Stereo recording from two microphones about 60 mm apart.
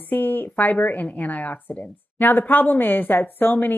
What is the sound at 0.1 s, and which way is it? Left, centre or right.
Speech, left.